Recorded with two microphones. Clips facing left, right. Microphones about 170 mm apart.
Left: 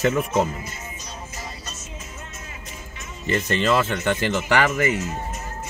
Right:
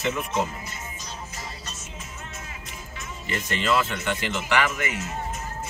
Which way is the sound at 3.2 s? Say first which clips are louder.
Left 6 dB; 35° left (ahead or behind).